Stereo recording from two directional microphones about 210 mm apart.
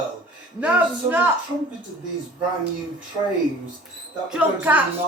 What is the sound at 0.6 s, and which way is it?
Speech, 10° right (ahead or behind).